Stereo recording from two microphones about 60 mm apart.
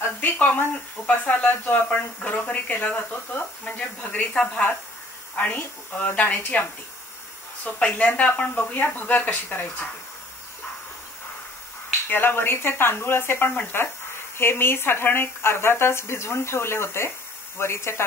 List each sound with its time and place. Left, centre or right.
0.0 s speech: left
7.8 s speech: left
12.1 s speech: left